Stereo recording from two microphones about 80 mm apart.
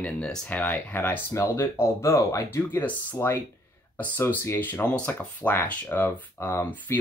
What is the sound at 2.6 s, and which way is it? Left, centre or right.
Speech, left.